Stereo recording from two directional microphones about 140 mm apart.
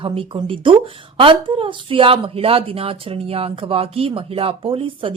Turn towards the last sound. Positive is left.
turn(degrees=-40)  # may be behind; listen again after turning